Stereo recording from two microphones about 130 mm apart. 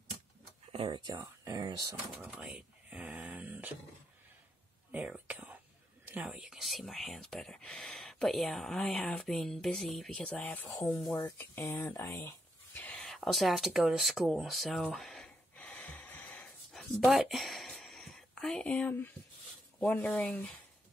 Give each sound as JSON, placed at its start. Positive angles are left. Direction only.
{"t": 0.7, "sound": "speech", "side_deg": -45}
{"t": 1.1, "sound": "speech", "side_deg": -25}
{"t": 2.2, "sound": "a sound", "side_deg": -10}
{"t": 4.9, "sound": "whispering", "side_deg": -10}
{"t": 6.2, "sound": "speech", "side_deg": -5}
{"t": 11.2, "sound": "speech", "side_deg": 15}
{"t": 12.9, "sound": "a sound", "side_deg": 5}
{"t": 19.8, "sound": "speech", "side_deg": 10}